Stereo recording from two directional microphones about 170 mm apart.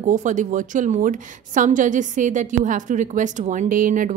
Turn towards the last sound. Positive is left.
turn(degrees=-50)  # may be behind; listen again after turning